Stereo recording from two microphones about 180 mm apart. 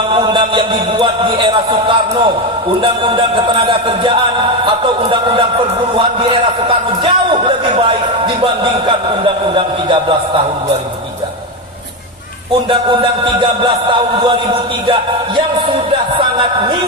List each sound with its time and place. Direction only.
0.1 s a man's voice: 25° right (ahead or behind)
9.2 s a man's voice: 30° right (ahead or behind)
12.9 s a man's voice: 25° right (ahead or behind)